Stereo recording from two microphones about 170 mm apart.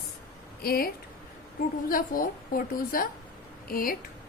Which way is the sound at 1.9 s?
55° left (ahead or behind).